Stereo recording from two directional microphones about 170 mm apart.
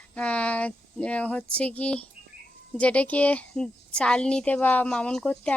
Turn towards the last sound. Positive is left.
turn(degrees=5)  # may be behind; listen again after turning